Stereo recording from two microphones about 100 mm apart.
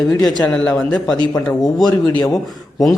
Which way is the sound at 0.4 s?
10° left (ahead or behind).